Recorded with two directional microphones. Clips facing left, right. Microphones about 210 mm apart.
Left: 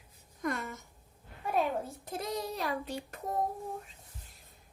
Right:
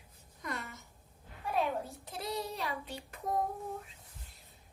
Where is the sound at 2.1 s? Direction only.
45° left (ahead or behind).